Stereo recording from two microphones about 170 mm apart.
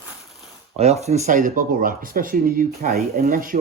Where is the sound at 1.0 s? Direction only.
40° right (ahead or behind).